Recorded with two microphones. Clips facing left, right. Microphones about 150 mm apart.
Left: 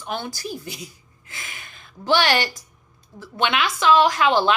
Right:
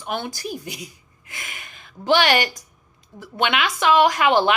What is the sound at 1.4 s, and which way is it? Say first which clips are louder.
Speech: right 1 dB; 50° right (ahead or behind).